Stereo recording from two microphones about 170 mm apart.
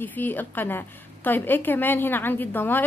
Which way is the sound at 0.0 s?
10° left (ahead or behind).